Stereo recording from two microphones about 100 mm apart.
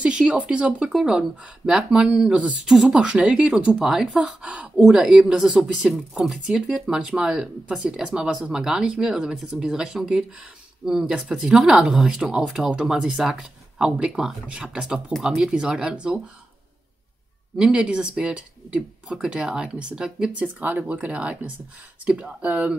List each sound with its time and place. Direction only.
0.0 s speech: 10° right (ahead or behind)
17.6 s speech: 10° right (ahead or behind)